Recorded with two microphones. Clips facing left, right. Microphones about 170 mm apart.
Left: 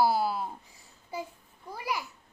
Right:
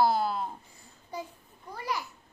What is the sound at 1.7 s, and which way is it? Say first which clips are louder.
Speech: even; 10° left (ahead or behind).